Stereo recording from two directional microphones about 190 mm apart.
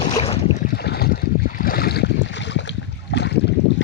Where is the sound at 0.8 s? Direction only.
55° left (ahead or behind).